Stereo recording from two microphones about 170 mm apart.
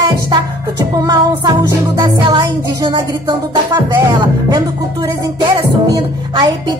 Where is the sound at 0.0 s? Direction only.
25° right (ahead or behind).